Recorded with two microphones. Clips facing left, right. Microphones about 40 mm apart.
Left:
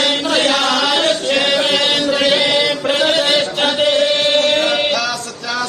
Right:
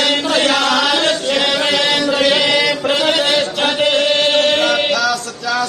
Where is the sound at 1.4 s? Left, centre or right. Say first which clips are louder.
Left 2 dB; right.